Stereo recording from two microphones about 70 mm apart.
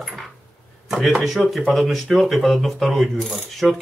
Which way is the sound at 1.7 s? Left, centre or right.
Centre.